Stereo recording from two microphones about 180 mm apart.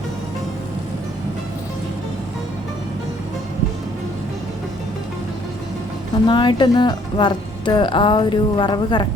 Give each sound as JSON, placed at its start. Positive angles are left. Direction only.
{"t": 6.2, "sound": "speech", "side_deg": 25}